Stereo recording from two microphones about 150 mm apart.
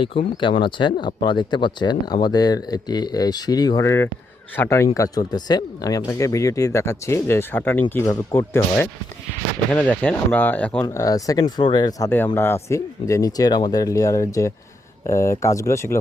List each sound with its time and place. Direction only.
0.0 s speech: 35° left (ahead or behind); by 8.6 s 20° left (ahead or behind)
9.7 s speech: 10° left (ahead or behind)
10.8 s speech: 25° left (ahead or behind)